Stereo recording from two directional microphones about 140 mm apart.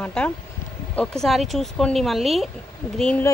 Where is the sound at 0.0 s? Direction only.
10° left (ahead or behind).